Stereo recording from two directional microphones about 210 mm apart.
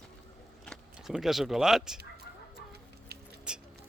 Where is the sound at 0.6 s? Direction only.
Centre (ahead or behind).